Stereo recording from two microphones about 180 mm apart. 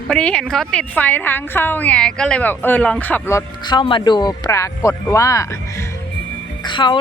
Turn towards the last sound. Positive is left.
turn(degrees=25)  # may be behind; listen again after turning